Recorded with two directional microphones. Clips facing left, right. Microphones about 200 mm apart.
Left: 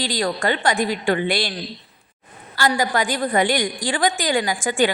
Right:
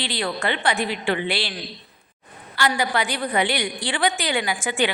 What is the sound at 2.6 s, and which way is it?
A woman's voice, 40° left (ahead or behind).